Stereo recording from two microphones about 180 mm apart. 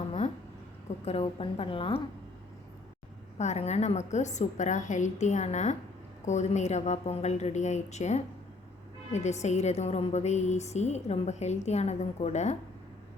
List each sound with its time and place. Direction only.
1.0 s a woman's voice: 35° left (ahead or behind)
3.3 s a woman's voice: 40° left (ahead or behind)